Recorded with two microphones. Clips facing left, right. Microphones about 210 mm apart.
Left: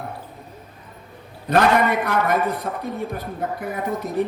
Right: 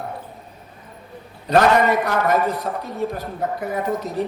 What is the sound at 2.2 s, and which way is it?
Speech, 55° left (ahead or behind).